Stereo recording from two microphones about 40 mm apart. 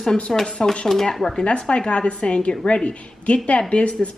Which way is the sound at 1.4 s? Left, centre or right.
Left.